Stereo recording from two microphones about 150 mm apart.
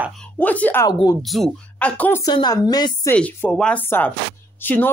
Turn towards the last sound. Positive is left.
turn(degrees=10)  # may be behind; listen again after turning